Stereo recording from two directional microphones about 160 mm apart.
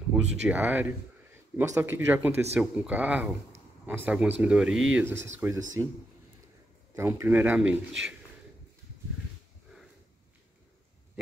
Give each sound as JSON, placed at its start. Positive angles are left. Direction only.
{"t": 0.1, "sound": "speech", "side_deg": -10}
{"t": 5.0, "sound": "speech", "side_deg": -15}
{"t": 7.0, "sound": "speech", "side_deg": -15}